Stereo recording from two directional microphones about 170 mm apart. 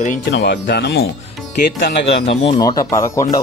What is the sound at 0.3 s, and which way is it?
Speech, 90° left.